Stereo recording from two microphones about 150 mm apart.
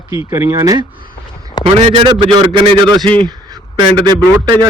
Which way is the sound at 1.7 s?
40° right (ahead or behind).